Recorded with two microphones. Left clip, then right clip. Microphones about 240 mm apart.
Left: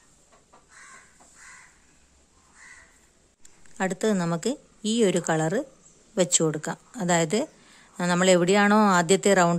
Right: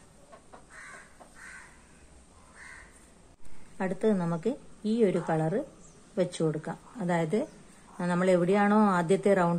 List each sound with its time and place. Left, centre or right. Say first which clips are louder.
3.7 s a woman's voice: left 3 dB; left